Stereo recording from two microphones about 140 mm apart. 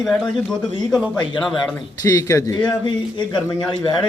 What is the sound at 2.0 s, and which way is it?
Speech, 25° left (ahead or behind).